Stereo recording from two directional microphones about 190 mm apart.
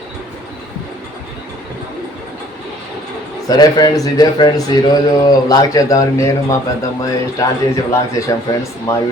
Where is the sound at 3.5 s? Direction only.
20° left (ahead or behind).